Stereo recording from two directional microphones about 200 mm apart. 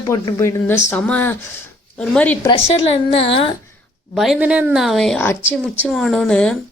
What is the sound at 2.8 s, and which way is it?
Speech, 30° left (ahead or behind).